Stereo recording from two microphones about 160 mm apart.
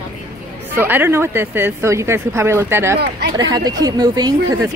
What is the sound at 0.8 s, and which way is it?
Speech, 15° right (ahead or behind).